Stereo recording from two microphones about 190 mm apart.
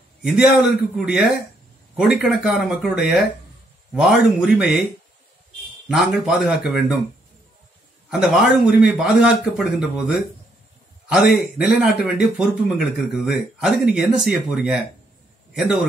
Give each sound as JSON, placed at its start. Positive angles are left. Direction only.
{"t": 0.2, "sound": "a man's voice", "side_deg": -5}
{"t": 5.9, "sound": "a man's voice", "side_deg": 0}
{"t": 8.1, "sound": "a man's voice", "side_deg": -5}